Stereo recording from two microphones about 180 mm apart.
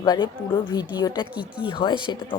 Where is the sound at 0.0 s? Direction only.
25° left (ahead or behind).